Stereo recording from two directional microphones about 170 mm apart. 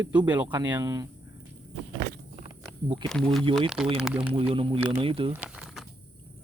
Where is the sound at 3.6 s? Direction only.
5° right (ahead or behind).